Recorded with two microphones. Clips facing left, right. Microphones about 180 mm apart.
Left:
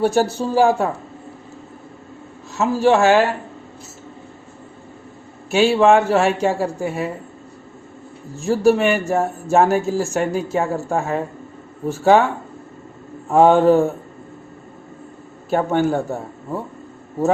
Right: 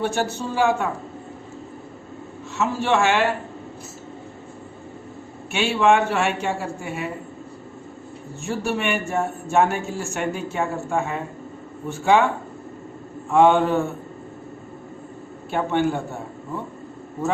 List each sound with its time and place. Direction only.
0.0 s speech: 35° left (ahead or behind)
2.6 s speech: 35° left (ahead or behind)
5.5 s speech: 35° left (ahead or behind)
8.4 s speech: 35° left (ahead or behind)
13.3 s speech: 40° left (ahead or behind)
15.4 s speech: 40° left (ahead or behind)